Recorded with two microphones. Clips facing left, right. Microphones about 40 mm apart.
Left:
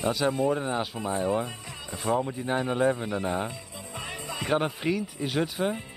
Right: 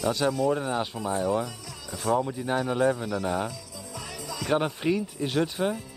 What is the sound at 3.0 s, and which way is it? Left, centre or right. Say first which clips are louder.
Speech: right 1 dB; left.